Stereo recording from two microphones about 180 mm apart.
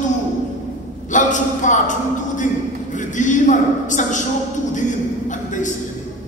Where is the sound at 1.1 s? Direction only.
45° left (ahead or behind).